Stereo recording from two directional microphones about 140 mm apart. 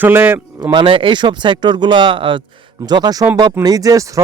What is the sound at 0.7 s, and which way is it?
Speech, 35° right (ahead or behind).